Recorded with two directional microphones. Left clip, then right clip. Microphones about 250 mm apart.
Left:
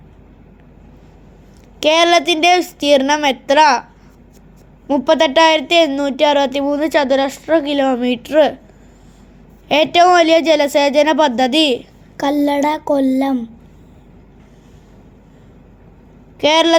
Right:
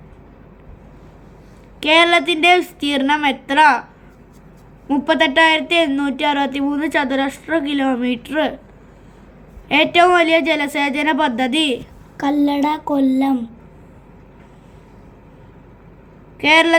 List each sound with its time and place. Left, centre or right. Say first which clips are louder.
1.8 s a woman's voice: left 1 dB; left
4.9 s a woman's voice: left 3 dB; left
9.6 s a woman's voice: left 2 dB; left